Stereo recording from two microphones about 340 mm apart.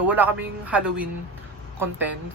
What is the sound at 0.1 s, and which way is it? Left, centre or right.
Speech, centre.